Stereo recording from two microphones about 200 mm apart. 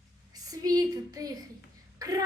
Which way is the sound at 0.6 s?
20° right (ahead or behind).